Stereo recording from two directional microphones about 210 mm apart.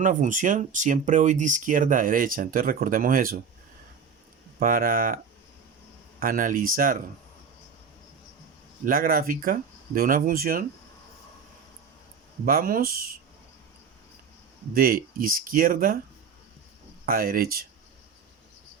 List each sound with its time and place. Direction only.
0.0 s speech: 40° right (ahead or behind)
4.6 s speech: 40° right (ahead or behind)
8.8 s speech: 45° right (ahead or behind)
12.5 s speech: 45° right (ahead or behind)
14.7 s speech: 45° right (ahead or behind)
17.1 s speech: 45° right (ahead or behind)